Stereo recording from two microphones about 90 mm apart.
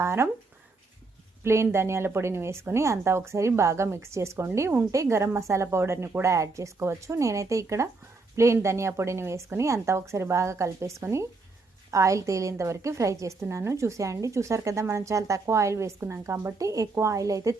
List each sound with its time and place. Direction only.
0.0 s speech: 30° right (ahead or behind)
1.5 s a woman's voice: 30° right (ahead or behind)